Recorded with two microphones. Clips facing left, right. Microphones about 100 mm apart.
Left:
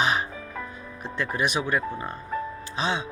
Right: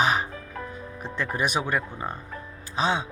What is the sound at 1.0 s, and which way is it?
Speech, 45° right (ahead or behind).